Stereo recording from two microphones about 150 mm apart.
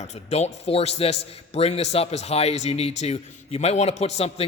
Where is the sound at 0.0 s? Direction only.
45° left (ahead or behind).